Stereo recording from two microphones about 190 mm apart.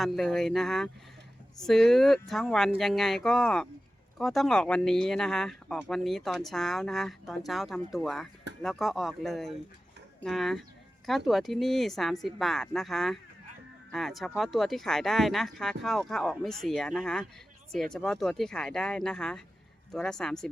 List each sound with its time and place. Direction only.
0.0 s speech: centre (ahead or behind)